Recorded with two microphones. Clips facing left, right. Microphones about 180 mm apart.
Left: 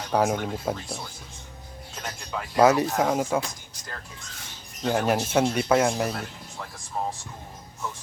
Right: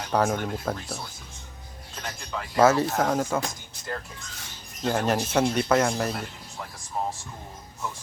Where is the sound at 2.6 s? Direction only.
15° left (ahead or behind).